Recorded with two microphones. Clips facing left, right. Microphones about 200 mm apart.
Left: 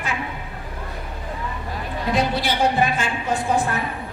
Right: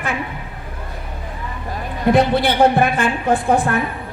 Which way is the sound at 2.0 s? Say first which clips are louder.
Right 8 dB; 55° right (ahead or behind).